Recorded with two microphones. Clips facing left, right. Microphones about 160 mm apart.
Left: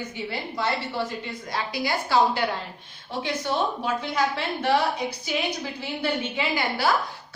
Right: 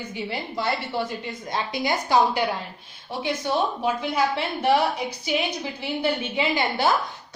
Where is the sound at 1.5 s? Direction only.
20° right (ahead or behind).